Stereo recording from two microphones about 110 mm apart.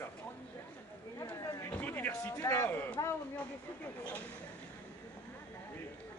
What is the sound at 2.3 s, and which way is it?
Speech, 20° left (ahead or behind).